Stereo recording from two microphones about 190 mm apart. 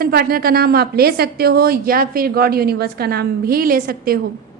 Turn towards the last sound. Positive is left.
turn(degrees=-50)  # may be behind; listen again after turning